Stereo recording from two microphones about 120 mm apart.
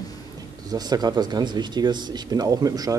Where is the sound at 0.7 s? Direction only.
35° right (ahead or behind).